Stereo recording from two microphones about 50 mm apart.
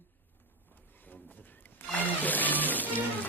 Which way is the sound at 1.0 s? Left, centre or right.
Left.